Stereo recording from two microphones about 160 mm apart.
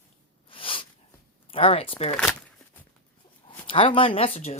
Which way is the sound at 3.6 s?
35° left (ahead or behind).